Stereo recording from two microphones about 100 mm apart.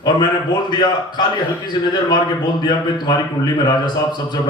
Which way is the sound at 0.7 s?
45° left (ahead or behind).